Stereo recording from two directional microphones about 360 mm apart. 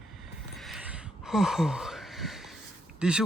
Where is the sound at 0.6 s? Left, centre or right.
Centre.